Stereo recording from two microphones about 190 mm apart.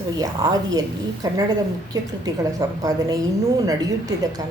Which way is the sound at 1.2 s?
20° right (ahead or behind).